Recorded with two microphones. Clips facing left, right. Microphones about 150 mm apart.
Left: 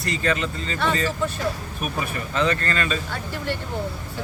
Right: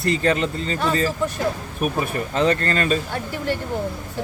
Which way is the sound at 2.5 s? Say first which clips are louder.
Right 4 dB; 40° right (ahead or behind).